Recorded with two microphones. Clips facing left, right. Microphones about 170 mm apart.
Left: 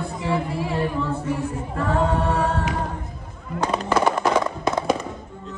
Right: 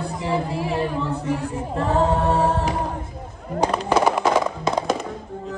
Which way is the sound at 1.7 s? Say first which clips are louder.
Right 3 dB; 25° right (ahead or behind).